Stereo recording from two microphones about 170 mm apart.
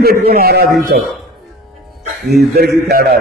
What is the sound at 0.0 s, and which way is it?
A man's voice, 65° right (ahead or behind).